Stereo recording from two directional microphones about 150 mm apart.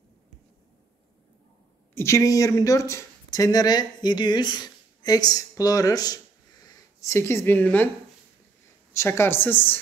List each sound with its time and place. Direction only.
2.0 s speech: 20° left (ahead or behind)
8.9 s a woman's voice: 15° left (ahead or behind)